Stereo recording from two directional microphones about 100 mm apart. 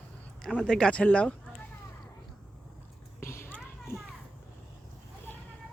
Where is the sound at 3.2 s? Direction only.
25° left (ahead or behind).